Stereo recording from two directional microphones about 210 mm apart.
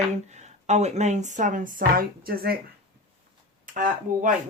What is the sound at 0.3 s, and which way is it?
Speech, 35° right (ahead or behind).